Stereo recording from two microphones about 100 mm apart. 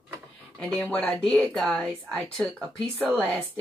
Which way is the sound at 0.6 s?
10° left (ahead or behind).